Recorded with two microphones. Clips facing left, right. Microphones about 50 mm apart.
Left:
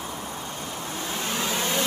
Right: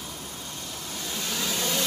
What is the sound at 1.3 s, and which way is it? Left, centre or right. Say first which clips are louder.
Vehicle: left 2 dB; left.